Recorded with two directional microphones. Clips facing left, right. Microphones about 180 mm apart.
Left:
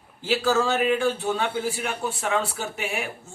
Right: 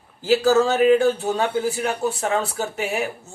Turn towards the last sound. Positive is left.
turn(degrees=-40)  # may be behind; listen again after turning